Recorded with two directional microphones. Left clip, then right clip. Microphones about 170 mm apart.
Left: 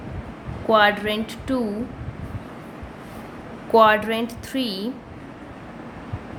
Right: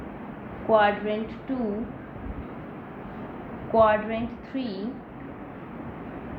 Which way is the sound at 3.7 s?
60° left (ahead or behind).